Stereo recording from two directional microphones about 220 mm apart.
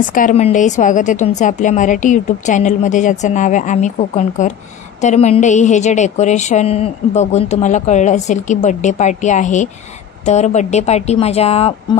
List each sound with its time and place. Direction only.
0.1 s a woman's voice: 35° left (ahead or behind)